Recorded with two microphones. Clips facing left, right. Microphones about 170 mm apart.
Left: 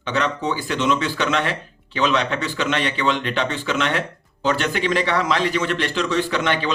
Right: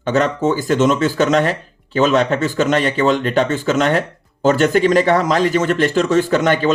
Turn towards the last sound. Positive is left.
turn(degrees=-45)  # may be behind; listen again after turning